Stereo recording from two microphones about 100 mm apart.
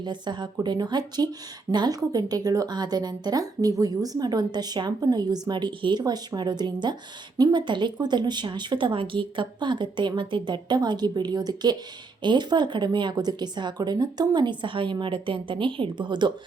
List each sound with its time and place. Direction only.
0.0 s speech: 50° right (ahead or behind)